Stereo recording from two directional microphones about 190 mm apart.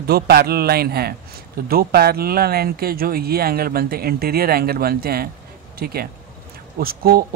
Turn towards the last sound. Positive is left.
turn(degrees=-50)  # may be behind; listen again after turning